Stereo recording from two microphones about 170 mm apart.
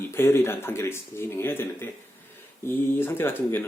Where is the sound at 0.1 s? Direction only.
15° left (ahead or behind).